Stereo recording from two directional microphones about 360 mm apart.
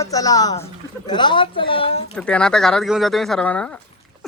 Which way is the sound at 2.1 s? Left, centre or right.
Centre.